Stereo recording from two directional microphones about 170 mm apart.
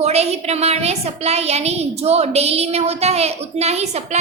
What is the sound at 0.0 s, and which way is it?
A woman's voice, 40° right (ahead or behind).